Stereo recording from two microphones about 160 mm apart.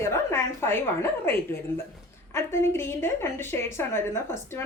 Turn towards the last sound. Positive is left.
turn(degrees=15)  # may be behind; listen again after turning